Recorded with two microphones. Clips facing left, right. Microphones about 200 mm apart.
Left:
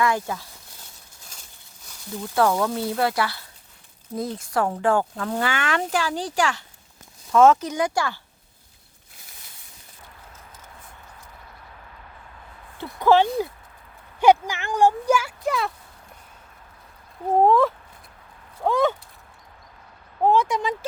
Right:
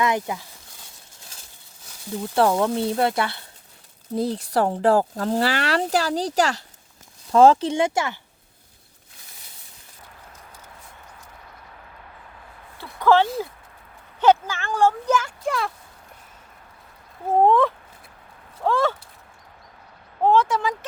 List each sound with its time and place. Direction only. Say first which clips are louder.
0.0 s speech: even; 20° right (ahead or behind)
2.2 s speech: right 1 dB; 20° right (ahead or behind)
12.7 s a sound: even; 20° left (ahead or behind)
14.2 s speech: left 1 dB; 15° left (ahead or behind)
17.2 s a sound: even; centre (ahead or behind)
18.6 s speech: left 1 dB; 15° left (ahead or behind)
20.2 s speech: right 1 dB; 10° left (ahead or behind)